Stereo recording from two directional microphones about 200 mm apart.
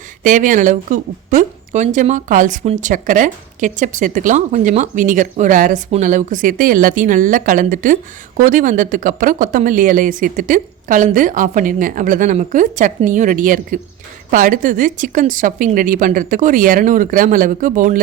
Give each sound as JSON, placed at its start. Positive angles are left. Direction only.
{"t": 0.2, "sound": "a woman's voice", "side_deg": -40}